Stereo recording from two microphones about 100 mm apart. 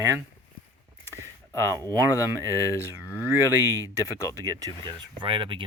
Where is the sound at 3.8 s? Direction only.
35° left (ahead or behind).